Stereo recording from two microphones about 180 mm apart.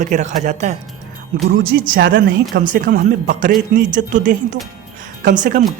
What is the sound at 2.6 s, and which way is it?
Speech, 50° right (ahead or behind).